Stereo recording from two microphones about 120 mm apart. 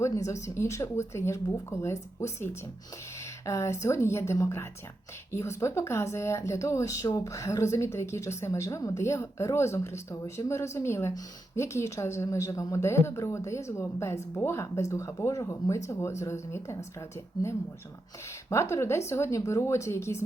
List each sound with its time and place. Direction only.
0.0 s speech: 25° left (ahead or behind)
18.4 s speech: 25° left (ahead or behind)